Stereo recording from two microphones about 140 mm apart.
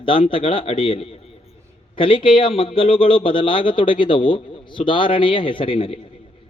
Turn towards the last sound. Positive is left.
turn(degrees=35)  # may be behind; listen again after turning